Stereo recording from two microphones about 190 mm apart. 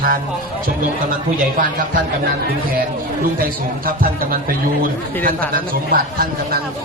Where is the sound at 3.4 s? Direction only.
50° right (ahead or behind).